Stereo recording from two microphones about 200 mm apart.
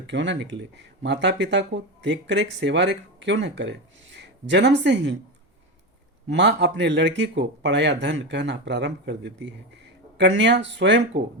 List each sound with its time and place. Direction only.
0.1 s speech: 65° right (ahead or behind)
6.2 s speech: 60° right (ahead or behind)